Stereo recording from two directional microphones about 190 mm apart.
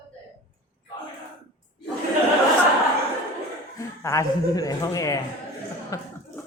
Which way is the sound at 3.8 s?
15° left (ahead or behind).